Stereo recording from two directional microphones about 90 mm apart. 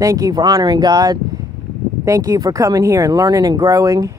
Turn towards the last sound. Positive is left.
turn(degrees=-40)  # may be behind; listen again after turning